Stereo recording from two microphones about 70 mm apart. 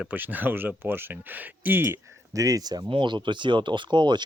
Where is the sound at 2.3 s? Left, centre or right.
Right.